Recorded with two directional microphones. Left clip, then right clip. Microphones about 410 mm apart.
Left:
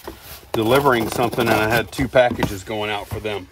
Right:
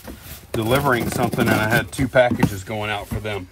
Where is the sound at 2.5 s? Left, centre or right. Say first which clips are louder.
Left 1 dB; left.